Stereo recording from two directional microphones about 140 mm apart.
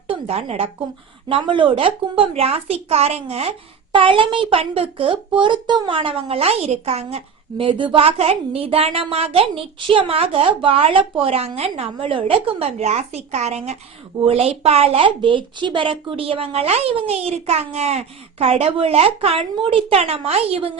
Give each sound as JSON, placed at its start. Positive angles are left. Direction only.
{"t": 0.1, "sound": "a woman's voice", "side_deg": -45}
{"t": 1.3, "sound": "a woman's voice", "side_deg": -35}
{"t": 7.6, "sound": "a woman's voice", "side_deg": -35}